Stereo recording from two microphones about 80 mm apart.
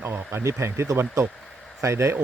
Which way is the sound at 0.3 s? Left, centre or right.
Right.